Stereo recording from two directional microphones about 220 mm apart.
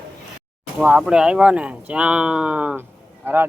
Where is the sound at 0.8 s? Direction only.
Centre (ahead or behind).